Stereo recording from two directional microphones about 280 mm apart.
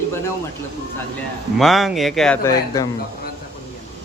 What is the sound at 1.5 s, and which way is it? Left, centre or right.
Speech, centre.